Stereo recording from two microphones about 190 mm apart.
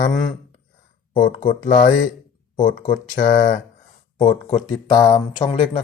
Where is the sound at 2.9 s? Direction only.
45° left (ahead or behind).